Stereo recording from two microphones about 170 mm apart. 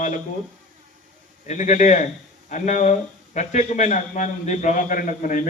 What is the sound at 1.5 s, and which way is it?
A man's voice, 45° left (ahead or behind).